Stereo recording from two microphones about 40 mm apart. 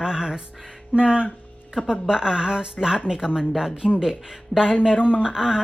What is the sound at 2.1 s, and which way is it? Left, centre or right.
A woman's voice, centre.